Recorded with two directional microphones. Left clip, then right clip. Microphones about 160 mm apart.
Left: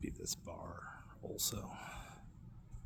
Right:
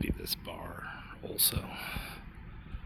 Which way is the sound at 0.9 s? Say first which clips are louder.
Right 7 dB; 15° left (ahead or behind).